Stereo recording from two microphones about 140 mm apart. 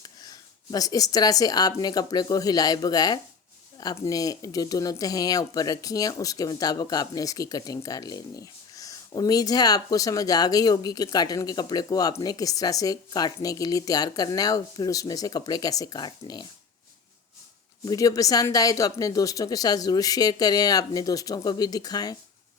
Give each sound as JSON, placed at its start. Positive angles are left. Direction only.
{"t": 0.0, "sound": "speech", "side_deg": 25}
{"t": 17.8, "sound": "speech", "side_deg": 25}